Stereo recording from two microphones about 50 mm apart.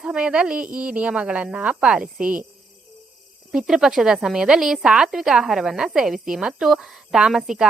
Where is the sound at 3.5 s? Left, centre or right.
Centre.